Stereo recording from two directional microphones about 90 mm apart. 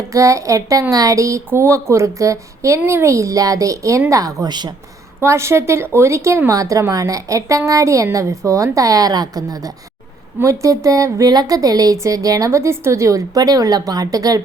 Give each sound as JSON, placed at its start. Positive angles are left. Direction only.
{"t": 0.1, "sound": "speech", "side_deg": -35}